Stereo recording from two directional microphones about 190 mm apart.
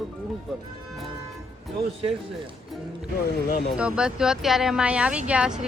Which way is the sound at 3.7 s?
5° right (ahead or behind).